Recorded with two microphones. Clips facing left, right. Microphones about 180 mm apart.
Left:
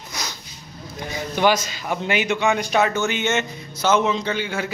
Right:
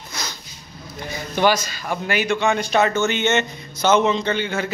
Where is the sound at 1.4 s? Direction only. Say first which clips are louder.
Right 1 dB; 15° left (ahead or behind).